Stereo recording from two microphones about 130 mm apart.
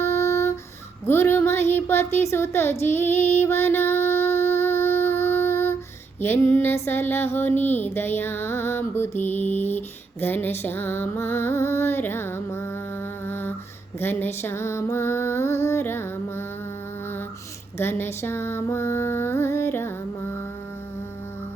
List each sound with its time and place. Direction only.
0.0 s music: 20° left (ahead or behind)
1.0 s female singing: 20° left (ahead or behind)
6.1 s music: 20° left (ahead or behind)
13.2 s a sound: 15° left (ahead or behind)
14.0 s female singing: 15° left (ahead or behind)
17.7 s a sound: 20° left (ahead or behind)